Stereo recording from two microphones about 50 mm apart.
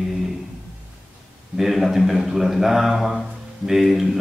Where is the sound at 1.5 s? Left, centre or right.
Centre.